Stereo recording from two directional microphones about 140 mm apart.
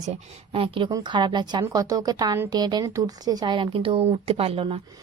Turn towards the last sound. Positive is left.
turn(degrees=-45)  # may be behind; listen again after turning